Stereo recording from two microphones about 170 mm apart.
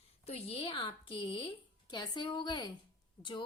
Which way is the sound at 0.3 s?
35° left (ahead or behind).